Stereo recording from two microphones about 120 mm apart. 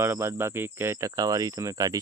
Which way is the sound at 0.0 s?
20° right (ahead or behind).